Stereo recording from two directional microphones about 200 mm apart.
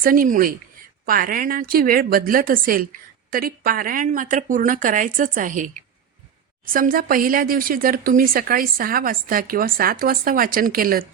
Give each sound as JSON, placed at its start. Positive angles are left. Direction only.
{"t": 0.0, "sound": "a woman's voice", "side_deg": -45}